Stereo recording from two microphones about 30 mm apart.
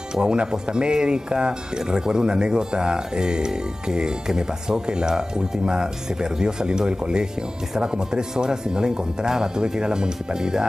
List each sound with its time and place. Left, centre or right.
0.1 s speech: right